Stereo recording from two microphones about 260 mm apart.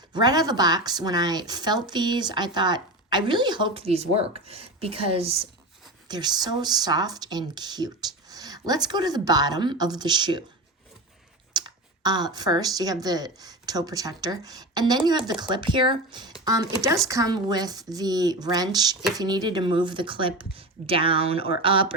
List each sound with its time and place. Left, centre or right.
0.1 s speech: centre
11.5 s speech: centre